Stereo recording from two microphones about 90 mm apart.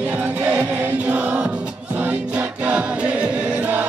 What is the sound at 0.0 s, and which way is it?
Music, 15° right (ahead or behind).